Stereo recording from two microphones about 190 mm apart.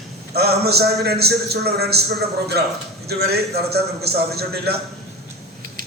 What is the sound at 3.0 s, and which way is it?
A man's voice, 55° right (ahead or behind).